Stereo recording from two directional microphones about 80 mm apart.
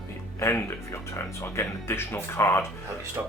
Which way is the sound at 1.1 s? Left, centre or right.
Left.